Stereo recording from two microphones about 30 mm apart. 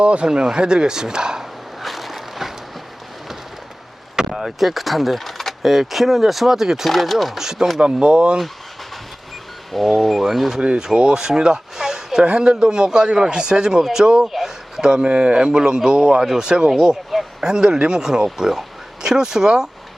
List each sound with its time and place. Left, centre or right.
0.0 s speech: right
1.8 s a sound: centre
4.3 s speech: centre
5.6 s speech: centre
6.8 s speech: centre
7.3 s speech: centre
7.8 s speech: right
9.7 s speech: centre
10.6 s a man's voice: right
14.2 s speech: centre
14.8 s a man's voice: right
16.6 s speech: centre
17.4 s a man's voice: right